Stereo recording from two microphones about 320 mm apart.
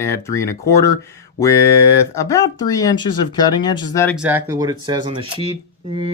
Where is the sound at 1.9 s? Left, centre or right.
Centre.